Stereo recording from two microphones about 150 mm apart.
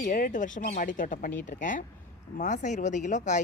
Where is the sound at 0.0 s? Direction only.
70° left (ahead or behind).